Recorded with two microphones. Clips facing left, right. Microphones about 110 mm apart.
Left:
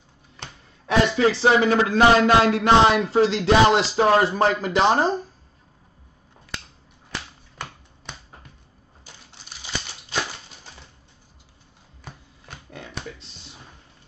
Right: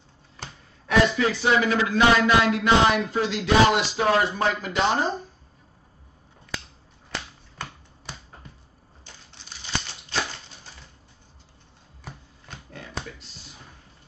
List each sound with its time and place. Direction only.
0.8 s speech: 30° left (ahead or behind)